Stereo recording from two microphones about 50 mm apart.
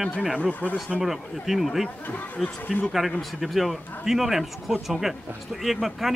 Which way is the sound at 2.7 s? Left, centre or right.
Left.